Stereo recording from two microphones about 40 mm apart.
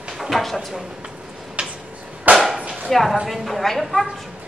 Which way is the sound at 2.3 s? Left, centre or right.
Centre.